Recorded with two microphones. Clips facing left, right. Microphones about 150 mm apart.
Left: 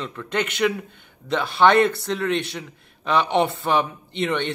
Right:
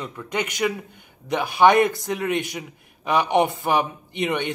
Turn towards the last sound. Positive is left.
turn(degrees=-15)  # may be behind; listen again after turning